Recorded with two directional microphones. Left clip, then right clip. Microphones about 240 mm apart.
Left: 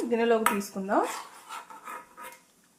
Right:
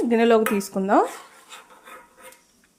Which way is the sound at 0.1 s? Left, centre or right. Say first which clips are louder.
Right 6 dB; right.